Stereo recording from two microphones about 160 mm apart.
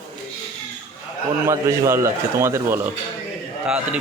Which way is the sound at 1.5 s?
20° right (ahead or behind).